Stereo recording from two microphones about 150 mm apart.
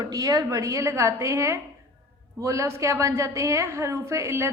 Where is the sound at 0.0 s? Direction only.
25° right (ahead or behind).